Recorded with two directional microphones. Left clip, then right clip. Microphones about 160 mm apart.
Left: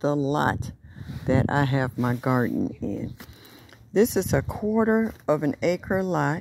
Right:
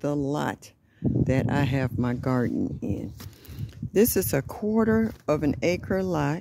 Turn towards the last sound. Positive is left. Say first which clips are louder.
# left 2 dB
turn(degrees=-20)  # may be behind; listen again after turning